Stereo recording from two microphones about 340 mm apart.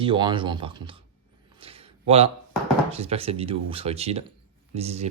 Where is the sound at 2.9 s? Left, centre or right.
Centre.